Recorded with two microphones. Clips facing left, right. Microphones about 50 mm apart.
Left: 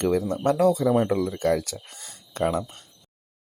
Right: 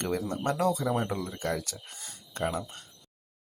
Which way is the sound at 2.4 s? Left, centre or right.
Left.